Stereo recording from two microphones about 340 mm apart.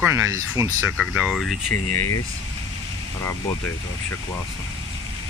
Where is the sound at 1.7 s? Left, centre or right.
Left.